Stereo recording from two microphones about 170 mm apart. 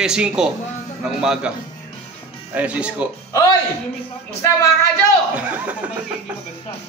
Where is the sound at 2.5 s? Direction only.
5° right (ahead or behind).